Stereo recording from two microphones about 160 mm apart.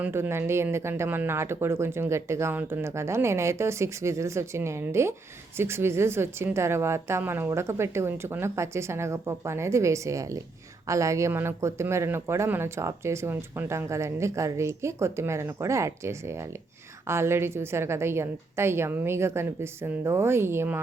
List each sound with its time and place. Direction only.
0.0 s a man's voice: 15° right (ahead or behind)